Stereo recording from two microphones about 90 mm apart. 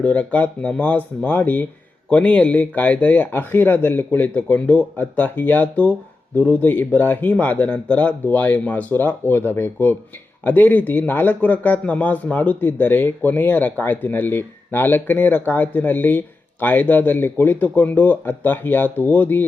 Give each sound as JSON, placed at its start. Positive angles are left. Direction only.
{"t": 0.0, "sound": "speech", "side_deg": 15}